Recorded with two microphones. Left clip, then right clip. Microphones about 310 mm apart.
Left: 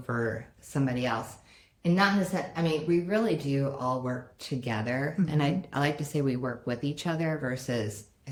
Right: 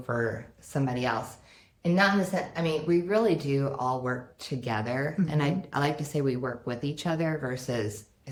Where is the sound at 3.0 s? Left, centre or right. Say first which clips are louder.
Right 3 dB; centre.